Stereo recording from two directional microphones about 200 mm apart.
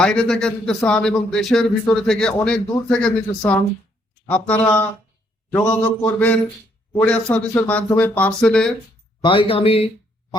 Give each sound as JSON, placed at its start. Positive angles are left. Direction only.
{"t": 0.0, "sound": "speech", "side_deg": 5}
{"t": 9.2, "sound": "speech", "side_deg": 25}